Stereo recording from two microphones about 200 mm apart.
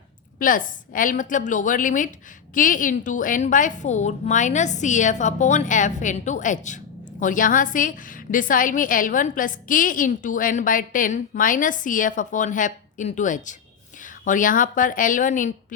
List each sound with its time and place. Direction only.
0.3 s a woman's voice: 45° left (ahead or behind)